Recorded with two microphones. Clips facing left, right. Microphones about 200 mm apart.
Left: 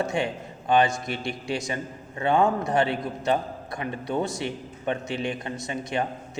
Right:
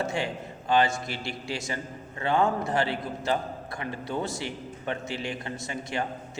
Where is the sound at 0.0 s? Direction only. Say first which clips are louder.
Left 3 dB; 15° left (ahead or behind).